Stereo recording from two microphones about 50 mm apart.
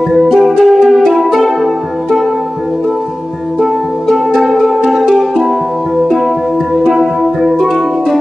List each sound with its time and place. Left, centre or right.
0.2 s music: centre
3.6 s music: centre
7.5 s music: centre